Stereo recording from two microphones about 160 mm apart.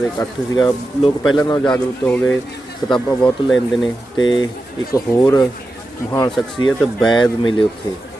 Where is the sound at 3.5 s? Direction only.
Centre (ahead or behind).